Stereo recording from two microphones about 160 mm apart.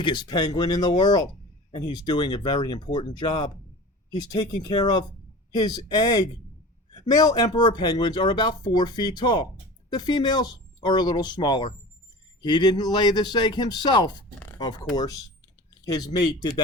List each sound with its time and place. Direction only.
0.0 s speech: 30° left (ahead or behind)